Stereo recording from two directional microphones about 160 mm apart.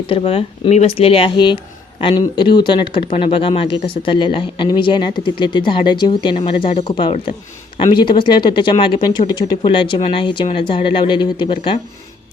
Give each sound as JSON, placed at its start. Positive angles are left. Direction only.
{"t": 0.1, "sound": "speech", "side_deg": 35}